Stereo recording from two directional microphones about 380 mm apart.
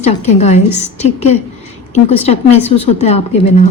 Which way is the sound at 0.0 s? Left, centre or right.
Centre.